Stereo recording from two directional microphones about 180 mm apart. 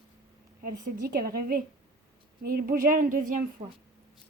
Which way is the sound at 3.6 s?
35° right (ahead or behind).